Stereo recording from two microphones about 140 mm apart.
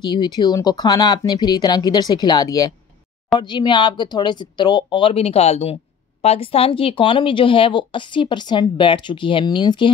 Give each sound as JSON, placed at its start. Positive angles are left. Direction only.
{"t": 0.0, "sound": "speech", "side_deg": 30}